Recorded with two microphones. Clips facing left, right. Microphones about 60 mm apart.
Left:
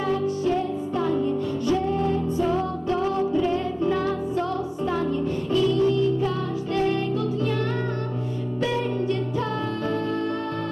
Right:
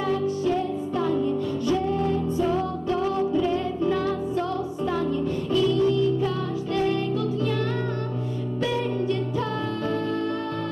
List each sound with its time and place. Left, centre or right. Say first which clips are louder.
0.0 s music: even; left